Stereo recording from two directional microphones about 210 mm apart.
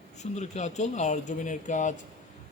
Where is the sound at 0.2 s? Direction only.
35° left (ahead or behind).